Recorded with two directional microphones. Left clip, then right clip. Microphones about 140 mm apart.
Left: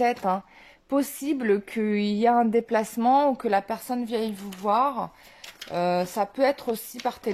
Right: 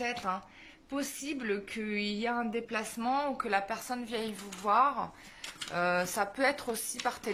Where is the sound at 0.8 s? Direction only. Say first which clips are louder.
Left 11 dB; 65° left (ahead or behind).